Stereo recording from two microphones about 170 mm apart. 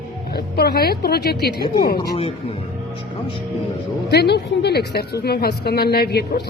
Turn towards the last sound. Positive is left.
turn(degrees=70)  # may be behind; listen again after turning